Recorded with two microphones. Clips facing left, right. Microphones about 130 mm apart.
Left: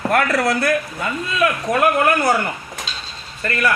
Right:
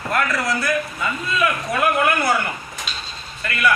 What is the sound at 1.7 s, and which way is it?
Speech, 40° left (ahead or behind).